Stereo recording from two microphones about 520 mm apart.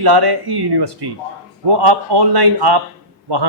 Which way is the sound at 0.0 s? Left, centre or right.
Right.